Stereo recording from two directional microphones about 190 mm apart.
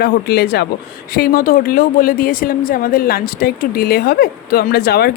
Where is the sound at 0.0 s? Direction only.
55° left (ahead or behind).